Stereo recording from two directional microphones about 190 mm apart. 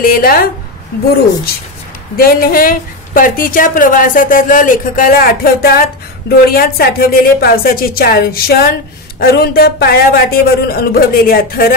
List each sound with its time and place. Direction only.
0.0 s a woman's voice: 50° left (ahead or behind)
2.1 s a woman's voice: 50° left (ahead or behind)